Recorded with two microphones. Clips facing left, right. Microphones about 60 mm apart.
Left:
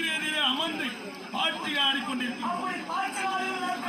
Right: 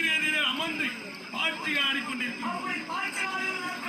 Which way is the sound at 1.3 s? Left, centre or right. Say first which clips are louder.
Left 1 dB; right.